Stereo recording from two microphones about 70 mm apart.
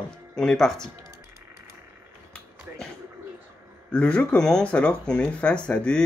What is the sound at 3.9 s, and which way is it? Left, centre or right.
Speech, centre.